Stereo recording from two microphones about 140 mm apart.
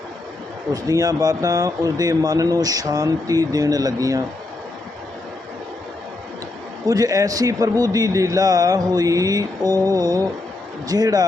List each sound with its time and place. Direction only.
0.7 s a man's voice: 25° right (ahead or behind)
6.8 s a man's voice: 25° right (ahead or behind)